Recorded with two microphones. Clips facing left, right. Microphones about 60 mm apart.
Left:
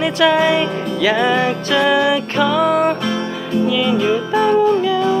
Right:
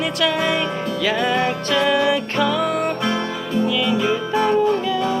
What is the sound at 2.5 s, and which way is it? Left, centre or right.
Music, left.